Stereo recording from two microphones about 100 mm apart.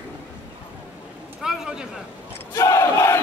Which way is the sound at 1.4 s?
5° right (ahead or behind).